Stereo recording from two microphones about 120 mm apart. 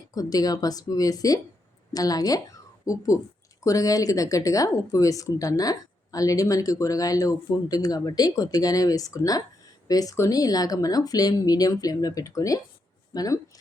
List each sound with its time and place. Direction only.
0.1 s speech: 30° left (ahead or behind)